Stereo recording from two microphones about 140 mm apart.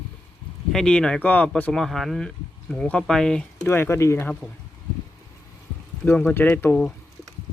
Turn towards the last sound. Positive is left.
turn(degrees=15)  # may be behind; listen again after turning